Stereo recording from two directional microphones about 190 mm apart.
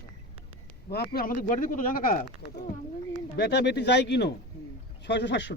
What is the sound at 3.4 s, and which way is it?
Speech, 60° left (ahead or behind).